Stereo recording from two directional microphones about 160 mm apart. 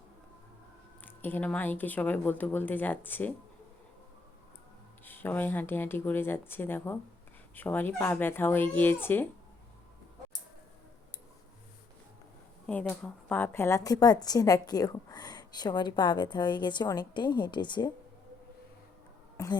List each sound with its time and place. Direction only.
1.0 s speech: 10° left (ahead or behind)
5.0 s speech: 10° left (ahead or behind)
12.9 s a woman's voice: 10° left (ahead or behind); by 17.9 s 25° left (ahead or behind)